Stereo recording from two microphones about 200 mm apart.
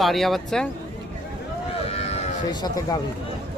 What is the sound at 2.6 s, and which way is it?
Speech, 20° left (ahead or behind).